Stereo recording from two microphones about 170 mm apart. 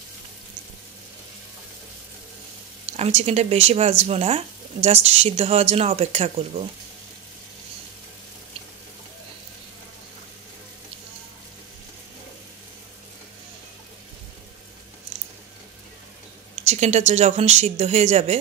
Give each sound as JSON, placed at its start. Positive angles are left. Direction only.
{"t": 2.9, "sound": "speech", "side_deg": -40}
{"t": 16.6, "sound": "speech", "side_deg": -40}